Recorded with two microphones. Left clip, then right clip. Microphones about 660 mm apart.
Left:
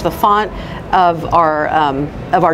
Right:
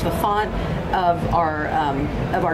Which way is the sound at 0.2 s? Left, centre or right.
Left.